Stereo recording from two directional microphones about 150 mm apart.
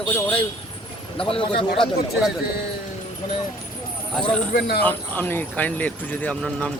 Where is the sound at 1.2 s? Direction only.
35° left (ahead or behind).